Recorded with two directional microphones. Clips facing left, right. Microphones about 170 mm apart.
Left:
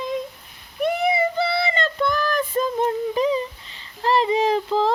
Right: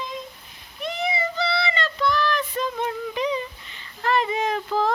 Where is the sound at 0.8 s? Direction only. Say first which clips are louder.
Left 7 dB; 55° left (ahead or behind).